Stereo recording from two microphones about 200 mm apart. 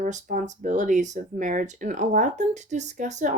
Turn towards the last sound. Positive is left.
turn(degrees=-35)  # may be behind; listen again after turning